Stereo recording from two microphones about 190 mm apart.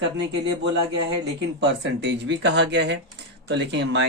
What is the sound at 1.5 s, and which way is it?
Speech, 65° right (ahead or behind).